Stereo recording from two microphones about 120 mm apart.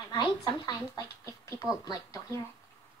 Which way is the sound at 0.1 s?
35° left (ahead or behind).